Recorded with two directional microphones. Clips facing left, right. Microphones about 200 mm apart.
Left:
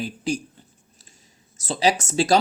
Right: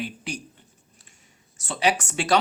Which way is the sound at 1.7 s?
35° left (ahead or behind).